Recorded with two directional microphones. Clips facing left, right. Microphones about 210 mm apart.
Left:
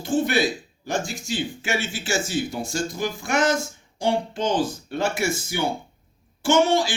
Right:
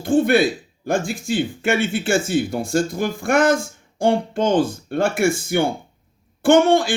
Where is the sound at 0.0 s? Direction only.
55° right (ahead or behind).